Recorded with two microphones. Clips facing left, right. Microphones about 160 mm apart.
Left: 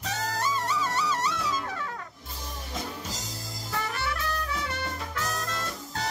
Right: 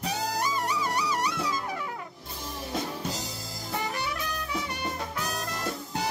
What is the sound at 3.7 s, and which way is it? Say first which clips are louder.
Music: even; 15° right (ahead or behind).